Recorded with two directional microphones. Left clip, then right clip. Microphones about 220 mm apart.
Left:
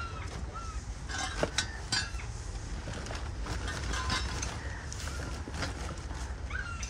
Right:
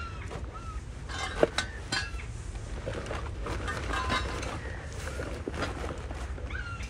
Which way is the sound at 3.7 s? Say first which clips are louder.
Right 4 dB; 15° right (ahead or behind).